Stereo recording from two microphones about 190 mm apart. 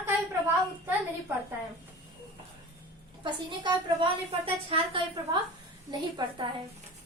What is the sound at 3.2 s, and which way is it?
A woman's voice, 25° right (ahead or behind).